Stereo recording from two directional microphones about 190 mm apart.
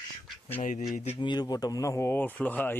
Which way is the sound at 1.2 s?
20° left (ahead or behind).